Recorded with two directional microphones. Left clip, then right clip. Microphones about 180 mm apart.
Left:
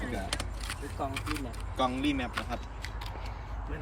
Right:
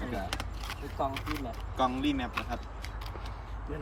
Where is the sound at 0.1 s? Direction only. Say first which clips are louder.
Even; 10° right (ahead or behind).